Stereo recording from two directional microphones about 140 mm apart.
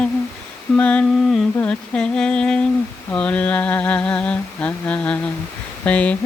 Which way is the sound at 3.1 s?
10° left (ahead or behind).